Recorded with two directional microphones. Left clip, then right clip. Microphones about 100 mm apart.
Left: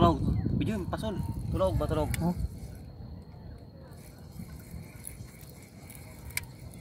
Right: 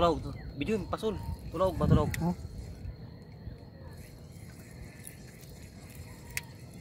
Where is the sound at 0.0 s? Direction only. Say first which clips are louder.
Left 2 dB; 25° right (ahead or behind); by 2.0 s 10° right (ahead or behind).